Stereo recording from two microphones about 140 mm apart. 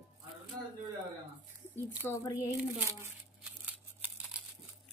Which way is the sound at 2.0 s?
20° left (ahead or behind).